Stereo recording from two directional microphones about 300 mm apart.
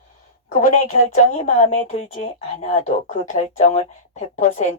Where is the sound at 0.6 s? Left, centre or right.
Left.